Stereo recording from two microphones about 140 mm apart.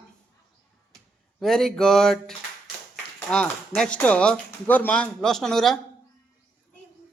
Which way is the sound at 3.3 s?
5° left (ahead or behind).